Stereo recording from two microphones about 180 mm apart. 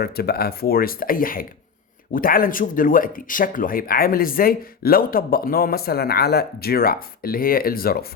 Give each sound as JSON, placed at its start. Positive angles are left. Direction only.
{"t": 0.0, "sound": "speech", "side_deg": 60}